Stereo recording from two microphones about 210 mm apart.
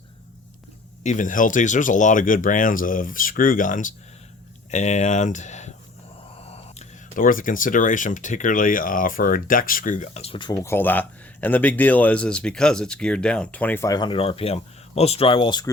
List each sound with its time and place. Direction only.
1.0 s speech: 35° left (ahead or behind); by 15.7 s 20° left (ahead or behind)